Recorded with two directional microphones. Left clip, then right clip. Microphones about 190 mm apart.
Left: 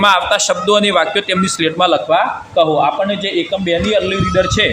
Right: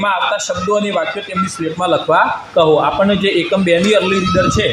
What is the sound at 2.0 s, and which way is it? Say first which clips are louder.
A man's voice: right 1 dB; 20° right (ahead or behind).